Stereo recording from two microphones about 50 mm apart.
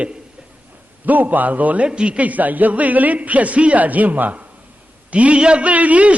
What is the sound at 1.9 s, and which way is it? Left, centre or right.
A man's voice, right.